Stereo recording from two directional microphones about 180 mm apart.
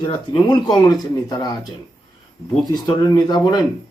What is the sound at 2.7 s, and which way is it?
Speech, 20° left (ahead or behind).